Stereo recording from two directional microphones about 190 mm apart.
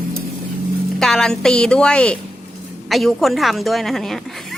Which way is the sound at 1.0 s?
5° left (ahead or behind).